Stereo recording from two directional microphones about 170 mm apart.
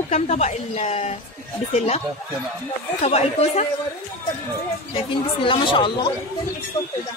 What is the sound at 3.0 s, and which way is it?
Speech, 35° left (ahead or behind).